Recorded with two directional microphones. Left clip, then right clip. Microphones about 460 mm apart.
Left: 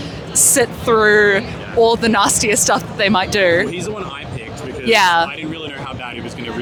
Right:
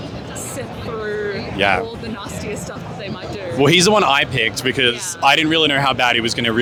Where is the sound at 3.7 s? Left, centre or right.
Right.